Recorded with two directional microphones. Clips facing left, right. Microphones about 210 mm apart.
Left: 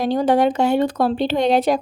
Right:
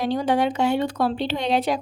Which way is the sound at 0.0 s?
45° left (ahead or behind).